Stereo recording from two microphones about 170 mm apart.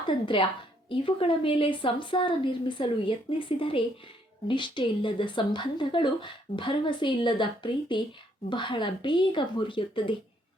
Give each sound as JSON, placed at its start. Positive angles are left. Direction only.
{"t": 0.9, "sound": "a woman's voice", "side_deg": 30}